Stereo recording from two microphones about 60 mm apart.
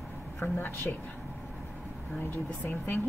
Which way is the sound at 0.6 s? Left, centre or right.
Left.